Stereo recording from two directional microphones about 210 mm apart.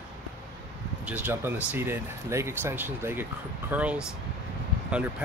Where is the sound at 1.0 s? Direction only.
10° right (ahead or behind).